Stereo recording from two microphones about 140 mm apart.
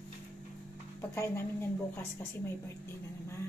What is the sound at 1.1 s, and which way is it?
Speech, 20° left (ahead or behind).